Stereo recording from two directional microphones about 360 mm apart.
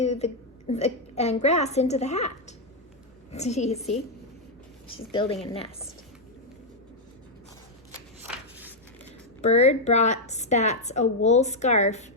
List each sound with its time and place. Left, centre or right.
0.0 s a woman's voice: centre
5.1 s a woman's voice: centre
9.4 s a woman's voice: centre